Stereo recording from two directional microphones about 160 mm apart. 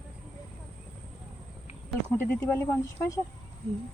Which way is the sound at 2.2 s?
10° left (ahead or behind).